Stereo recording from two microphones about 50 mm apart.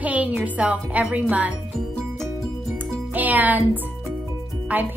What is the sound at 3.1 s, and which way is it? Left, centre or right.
Speech, right.